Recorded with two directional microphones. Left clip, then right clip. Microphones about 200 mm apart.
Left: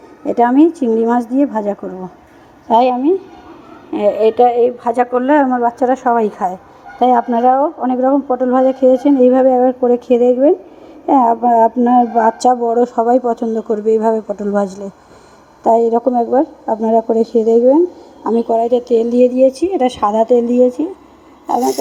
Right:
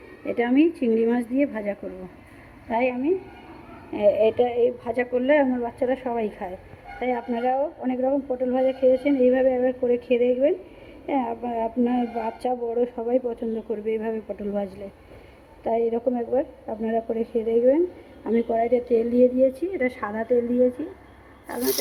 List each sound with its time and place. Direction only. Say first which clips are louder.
0.3 s speech: left 10 dB; 20° left (ahead or behind)
2.6 s a woman's voice: left 13 dB; 30° left (ahead or behind)
3.9 s a woman's voice: left 7 dB; 20° left (ahead or behind)
18.2 s speech: left 9 dB; 15° left (ahead or behind)